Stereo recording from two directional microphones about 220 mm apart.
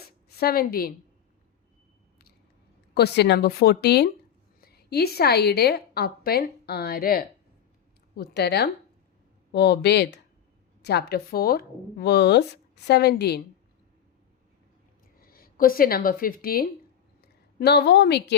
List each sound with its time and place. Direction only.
0.3 s a woman's voice: 45° left (ahead or behind)
2.9 s a woman's voice: 50° left (ahead or behind)
15.2 s a woman's voice: 40° left (ahead or behind)